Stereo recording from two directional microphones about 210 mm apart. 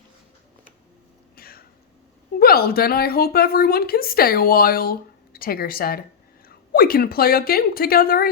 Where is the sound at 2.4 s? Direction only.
45° left (ahead or behind).